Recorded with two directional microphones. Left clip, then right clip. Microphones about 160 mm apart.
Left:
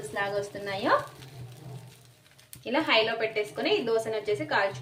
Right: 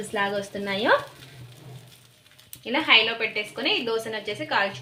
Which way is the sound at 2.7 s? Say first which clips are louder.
Right 5 dB; 10° right (ahead or behind).